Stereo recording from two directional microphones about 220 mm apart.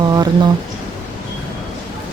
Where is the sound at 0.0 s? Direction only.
20° right (ahead or behind).